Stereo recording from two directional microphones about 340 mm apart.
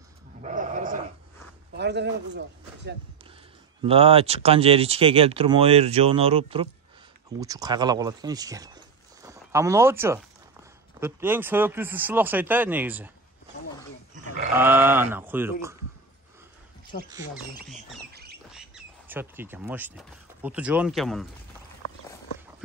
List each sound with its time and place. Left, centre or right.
0.4 s a sound: right
1.8 s a man's voice: right
3.8 s speech: centre
14.5 s speech: centre
18.1 s squawk: right
19.0 s speech: centre